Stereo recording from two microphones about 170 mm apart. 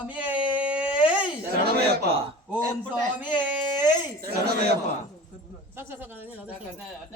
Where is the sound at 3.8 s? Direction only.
15° right (ahead or behind).